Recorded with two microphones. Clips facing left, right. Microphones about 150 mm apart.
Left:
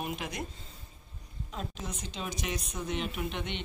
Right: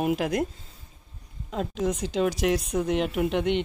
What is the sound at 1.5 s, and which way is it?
A woman's voice, 85° right.